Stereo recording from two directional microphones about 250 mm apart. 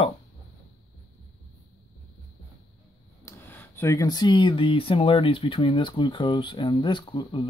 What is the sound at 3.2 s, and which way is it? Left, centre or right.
Speech, centre.